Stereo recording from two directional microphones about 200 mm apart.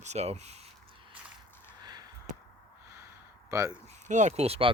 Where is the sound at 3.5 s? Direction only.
15° right (ahead or behind).